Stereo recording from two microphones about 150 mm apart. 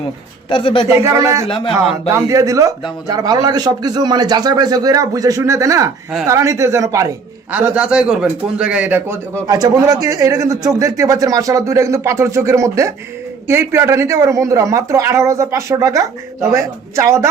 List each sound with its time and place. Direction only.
0.5 s speech: 35° left (ahead or behind)
1.0 s speech: 20° right (ahead or behind)
1.5 s speech: 35° left (ahead or behind)
2.2 s speech: 20° right (ahead or behind)
7.5 s a man's voice: 10° right (ahead or behind)
9.5 s speech: 25° right (ahead or behind)